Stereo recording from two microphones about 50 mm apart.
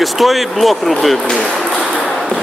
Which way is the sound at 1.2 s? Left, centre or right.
Left.